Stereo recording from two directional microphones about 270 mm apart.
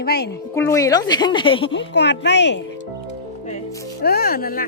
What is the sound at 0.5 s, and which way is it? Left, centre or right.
Speech, centre.